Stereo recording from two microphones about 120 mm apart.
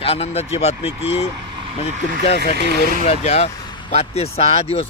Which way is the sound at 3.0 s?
65° left (ahead or behind).